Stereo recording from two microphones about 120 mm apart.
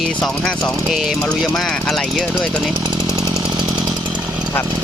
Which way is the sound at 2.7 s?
40° right (ahead or behind).